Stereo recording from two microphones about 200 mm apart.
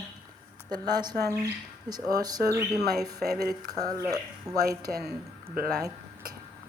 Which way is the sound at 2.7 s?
55° right (ahead or behind).